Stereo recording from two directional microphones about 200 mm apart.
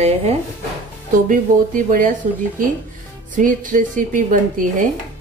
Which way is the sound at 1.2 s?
45° right (ahead or behind).